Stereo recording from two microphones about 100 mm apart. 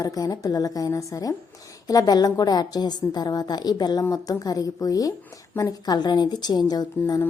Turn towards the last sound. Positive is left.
turn(degrees=40)  # may be behind; listen again after turning